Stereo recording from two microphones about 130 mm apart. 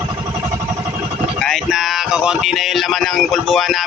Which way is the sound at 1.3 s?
5° left (ahead or behind).